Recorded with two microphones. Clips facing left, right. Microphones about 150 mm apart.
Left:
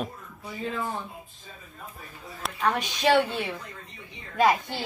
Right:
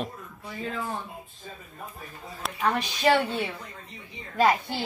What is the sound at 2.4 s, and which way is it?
Speech, 5° right (ahead or behind).